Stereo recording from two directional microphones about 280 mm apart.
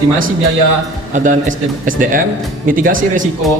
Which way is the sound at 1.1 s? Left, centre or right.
Right.